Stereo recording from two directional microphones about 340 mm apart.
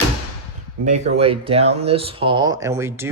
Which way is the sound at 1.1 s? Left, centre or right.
Centre.